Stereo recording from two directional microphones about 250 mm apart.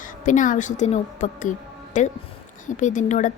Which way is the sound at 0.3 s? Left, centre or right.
Left.